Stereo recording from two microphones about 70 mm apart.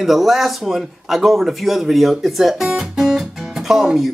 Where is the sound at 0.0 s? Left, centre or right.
Centre.